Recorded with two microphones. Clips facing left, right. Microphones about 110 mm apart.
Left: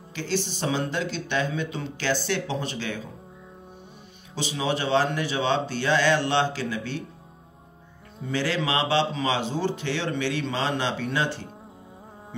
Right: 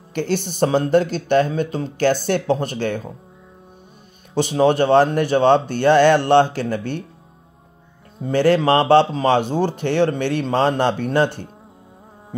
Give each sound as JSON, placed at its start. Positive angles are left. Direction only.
{"t": 0.1, "sound": "a man's voice", "side_deg": -55}
{"t": 4.4, "sound": "a man's voice", "side_deg": -55}
{"t": 8.2, "sound": "a man's voice", "side_deg": -50}